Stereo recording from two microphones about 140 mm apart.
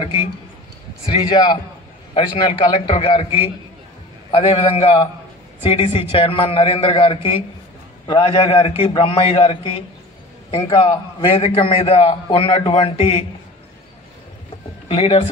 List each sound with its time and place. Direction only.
1.2 s a man's voice: 35° left (ahead or behind)
14.9 s a man's voice: 45° left (ahead or behind)